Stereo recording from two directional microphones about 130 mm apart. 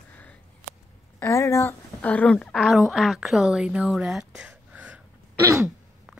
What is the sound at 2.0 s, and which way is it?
A woman's voice, 10° left (ahead or behind).